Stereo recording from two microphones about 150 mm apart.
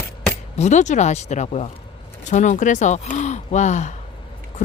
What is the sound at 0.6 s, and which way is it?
Speech, 50° left (ahead or behind).